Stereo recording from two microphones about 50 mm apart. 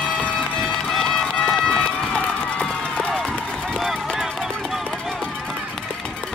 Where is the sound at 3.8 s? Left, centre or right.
Centre.